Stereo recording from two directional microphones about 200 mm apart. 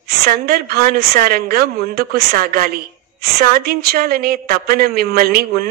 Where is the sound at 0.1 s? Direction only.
50° right (ahead or behind).